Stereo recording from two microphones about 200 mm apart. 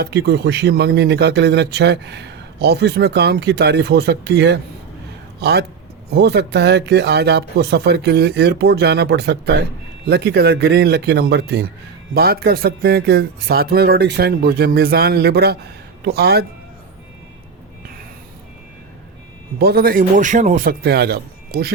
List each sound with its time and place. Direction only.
0.0 s a man's voice: 55° right (ahead or behind)
19.5 s a man's voice: 50° right (ahead or behind)